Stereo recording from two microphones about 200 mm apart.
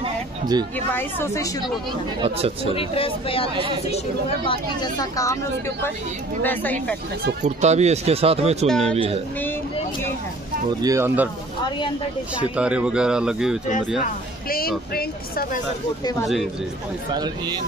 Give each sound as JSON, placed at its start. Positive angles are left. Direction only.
{"t": 0.0, "sound": "a sound", "side_deg": -20}
{"t": 0.9, "sound": "speech", "side_deg": 15}
{"t": 2.2, "sound": "speech", "side_deg": -30}
{"t": 2.7, "sound": "speech", "side_deg": 30}
{"t": 4.5, "sound": "speech", "side_deg": 20}
{"t": 7.4, "sound": "speech", "side_deg": -35}
{"t": 8.6, "sound": "speech", "side_deg": 5}
{"t": 8.9, "sound": "speech", "side_deg": -30}
{"t": 10.8, "sound": "speech", "side_deg": -15}
{"t": 12.4, "sound": "speech", "side_deg": -5}
{"t": 14.0, "sound": "speech", "side_deg": 45}
{"t": 16.0, "sound": "speech", "side_deg": 20}
{"t": 17.1, "sound": "speech", "side_deg": -20}